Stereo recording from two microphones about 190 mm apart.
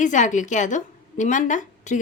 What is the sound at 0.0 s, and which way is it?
A woman's voice, 40° left (ahead or behind).